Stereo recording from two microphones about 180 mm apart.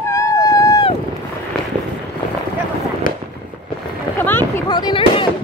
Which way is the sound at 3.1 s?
50° left (ahead or behind).